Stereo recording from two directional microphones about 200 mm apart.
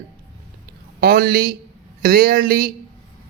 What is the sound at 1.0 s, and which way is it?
A man's voice, 50° right (ahead or behind).